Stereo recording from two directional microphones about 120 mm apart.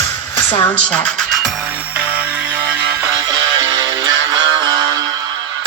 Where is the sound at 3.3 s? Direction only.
35° right (ahead or behind).